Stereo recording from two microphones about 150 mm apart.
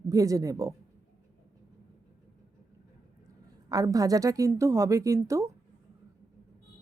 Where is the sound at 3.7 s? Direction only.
25° right (ahead or behind).